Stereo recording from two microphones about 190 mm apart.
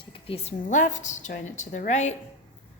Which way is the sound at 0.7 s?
40° left (ahead or behind).